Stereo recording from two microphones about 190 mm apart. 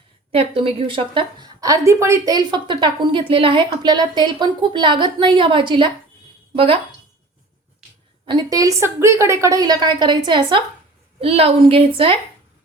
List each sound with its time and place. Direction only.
0.3 s a woman's voice: 30° right (ahead or behind)
8.3 s a woman's voice: 20° right (ahead or behind)